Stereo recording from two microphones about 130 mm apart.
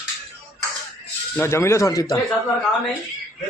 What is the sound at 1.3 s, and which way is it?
Speech, 20° left (ahead or behind).